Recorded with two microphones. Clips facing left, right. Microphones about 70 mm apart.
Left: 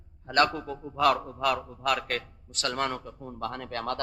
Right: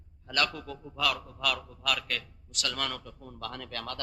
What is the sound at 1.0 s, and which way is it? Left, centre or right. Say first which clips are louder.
A man's voice: left 8 dB; left.